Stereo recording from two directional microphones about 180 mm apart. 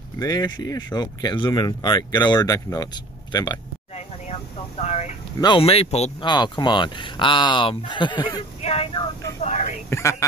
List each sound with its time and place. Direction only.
0.2 s speech: 20° left (ahead or behind)
4.3 s vehicle: 35° left (ahead or behind)
5.4 s speech: 30° left (ahead or behind)
6.2 s speech: 25° left (ahead or behind)
8.6 s vehicle: 35° left (ahead or behind)
9.4 s whispering: 40° left (ahead or behind)
9.8 s a sound: 15° left (ahead or behind)